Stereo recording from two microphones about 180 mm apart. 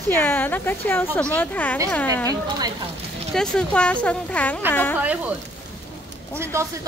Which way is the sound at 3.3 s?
5° left (ahead or behind).